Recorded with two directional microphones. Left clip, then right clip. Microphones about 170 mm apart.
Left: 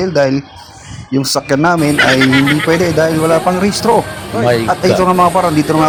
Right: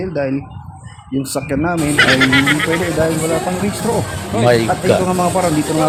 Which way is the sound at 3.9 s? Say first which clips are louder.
Left 8 dB; 15° left (ahead or behind).